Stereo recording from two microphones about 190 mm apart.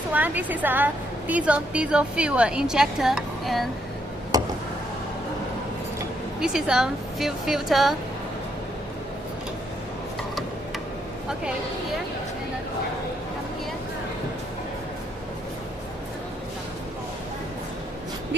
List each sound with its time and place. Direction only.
0.1 s a woman's voice: 10° right (ahead or behind)
4.3 s a sound: 20° right (ahead or behind)
6.4 s a woman's voice: 5° right (ahead or behind)